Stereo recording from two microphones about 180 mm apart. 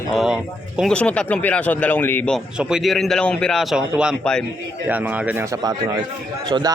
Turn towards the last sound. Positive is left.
turn(degrees=-25)  # may be behind; listen again after turning